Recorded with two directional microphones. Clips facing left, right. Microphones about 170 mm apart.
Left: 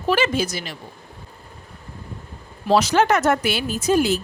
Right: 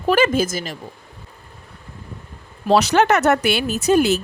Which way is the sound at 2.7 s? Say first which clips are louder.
Right 2 dB; 65° right (ahead or behind).